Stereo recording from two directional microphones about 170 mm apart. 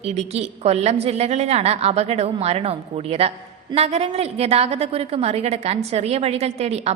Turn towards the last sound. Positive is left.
turn(degrees=-40)  # may be behind; listen again after turning